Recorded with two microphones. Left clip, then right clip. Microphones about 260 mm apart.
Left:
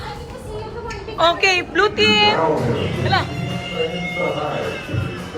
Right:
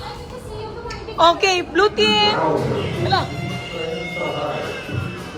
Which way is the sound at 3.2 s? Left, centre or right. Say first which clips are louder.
Left 1 dB; centre.